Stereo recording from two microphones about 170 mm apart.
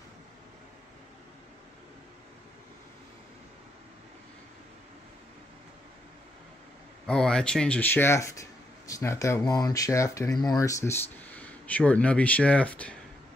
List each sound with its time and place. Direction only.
7.1 s speech: 5° left (ahead or behind)